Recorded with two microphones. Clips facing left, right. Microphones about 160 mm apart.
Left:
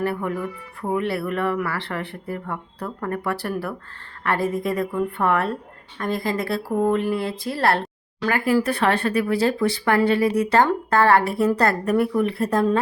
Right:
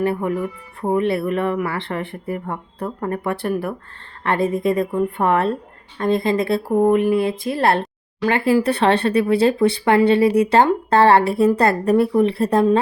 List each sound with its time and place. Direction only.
0.0 s speech: 20° right (ahead or behind)